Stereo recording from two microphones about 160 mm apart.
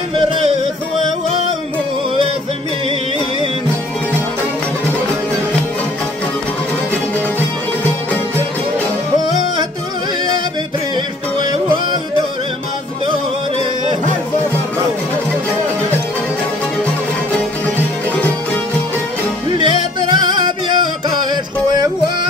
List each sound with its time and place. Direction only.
11.3 s music: 25° right (ahead or behind)
18.1 s music: 10° left (ahead or behind)
19.5 s music: 30° right (ahead or behind)